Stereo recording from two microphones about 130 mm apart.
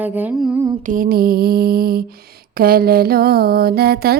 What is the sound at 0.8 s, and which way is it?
Music, 90° right.